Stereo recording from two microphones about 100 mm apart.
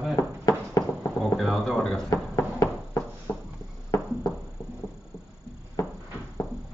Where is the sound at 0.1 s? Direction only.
35° left (ahead or behind).